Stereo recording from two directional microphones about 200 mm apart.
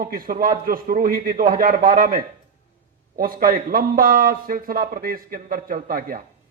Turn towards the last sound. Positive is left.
turn(degrees=-45)  # may be behind; listen again after turning